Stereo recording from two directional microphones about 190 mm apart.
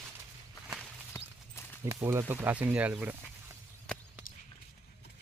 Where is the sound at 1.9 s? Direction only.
15° right (ahead or behind).